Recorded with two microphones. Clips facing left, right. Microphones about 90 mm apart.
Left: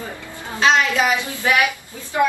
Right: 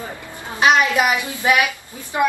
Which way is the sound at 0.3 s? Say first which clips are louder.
Right 1 dB; 15° right (ahead or behind).